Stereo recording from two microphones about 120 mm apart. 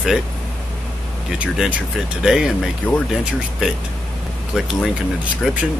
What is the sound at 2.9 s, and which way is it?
Speech, 10° left (ahead or behind).